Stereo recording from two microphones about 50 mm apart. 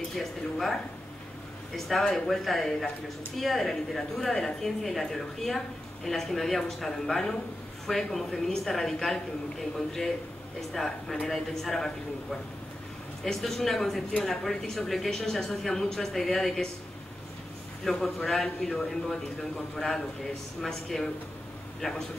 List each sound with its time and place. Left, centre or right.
0.2 s a man's voice: centre
1.9 s a man's voice: centre
17.8 s a woman's voice: centre
20.6 s a woman's voice: centre
21.8 s a woman's voice: centre